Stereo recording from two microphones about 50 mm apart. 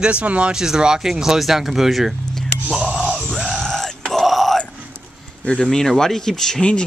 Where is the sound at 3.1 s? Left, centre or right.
Centre.